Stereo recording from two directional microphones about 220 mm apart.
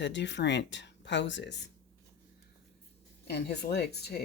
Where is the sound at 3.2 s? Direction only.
50° left (ahead or behind).